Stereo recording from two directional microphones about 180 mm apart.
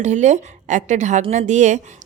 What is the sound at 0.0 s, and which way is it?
Speech, 40° right (ahead or behind).